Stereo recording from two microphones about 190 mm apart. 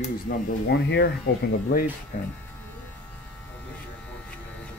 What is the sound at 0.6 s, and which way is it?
Speech, 65° left (ahead or behind).